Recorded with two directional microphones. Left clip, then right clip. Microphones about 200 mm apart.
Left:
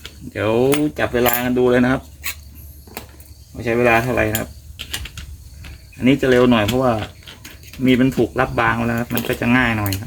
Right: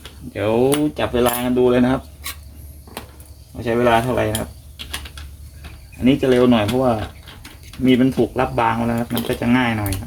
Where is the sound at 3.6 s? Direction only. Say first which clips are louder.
Left 1 dB; 20° left (ahead or behind).